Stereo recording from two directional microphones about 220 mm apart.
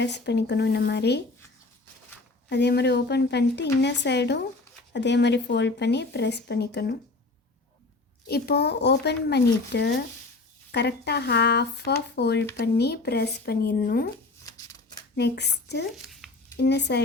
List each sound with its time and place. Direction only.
0.0 s speech: 50° left (ahead or behind)
2.5 s speech: 50° left (ahead or behind)
8.3 s speech: 45° left (ahead or behind)
14.4 s a sound: 15° left (ahead or behind)
15.1 s speech: 50° left (ahead or behind)
15.9 s a sound: centre (ahead or behind)
16.6 s speech: 50° left (ahead or behind)